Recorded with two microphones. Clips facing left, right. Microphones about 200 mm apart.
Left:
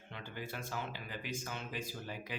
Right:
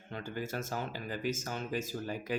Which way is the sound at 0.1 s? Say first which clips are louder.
Right 7 dB; 45° right (ahead or behind).